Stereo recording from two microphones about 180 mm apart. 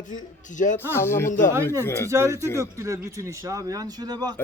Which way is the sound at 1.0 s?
15° left (ahead or behind).